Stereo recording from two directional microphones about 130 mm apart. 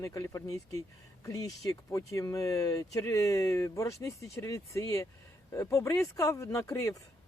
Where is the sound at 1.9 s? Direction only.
25° left (ahead or behind).